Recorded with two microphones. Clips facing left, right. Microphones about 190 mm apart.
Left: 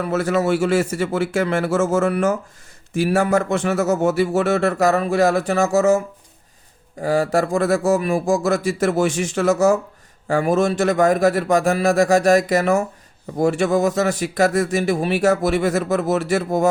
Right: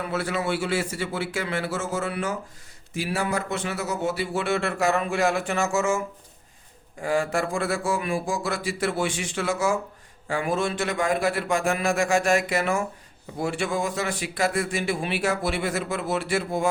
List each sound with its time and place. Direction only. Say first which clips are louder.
0.0 s speech: left 8 dB; 45° left (ahead or behind)
7.0 s speech: left 6 dB; 40° left (ahead or behind)